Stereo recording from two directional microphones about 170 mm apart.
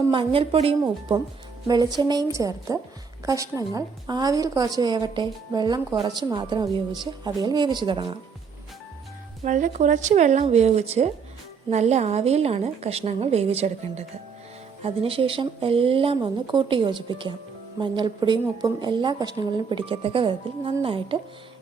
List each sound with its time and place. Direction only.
0.1 s a woman's voice: 30° right (ahead or behind)
9.4 s a woman's voice: 45° right (ahead or behind)